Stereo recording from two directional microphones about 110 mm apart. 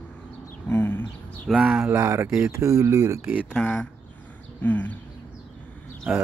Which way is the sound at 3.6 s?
5° left (ahead or behind).